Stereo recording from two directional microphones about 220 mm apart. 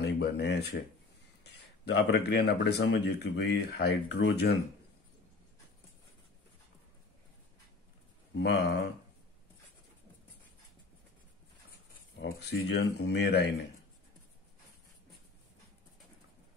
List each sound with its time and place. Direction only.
0.0 s speech: 50° left (ahead or behind)
1.9 s speech: 50° left (ahead or behind)
8.4 s speech: 50° left (ahead or behind)
12.3 s speech: 50° left (ahead or behind)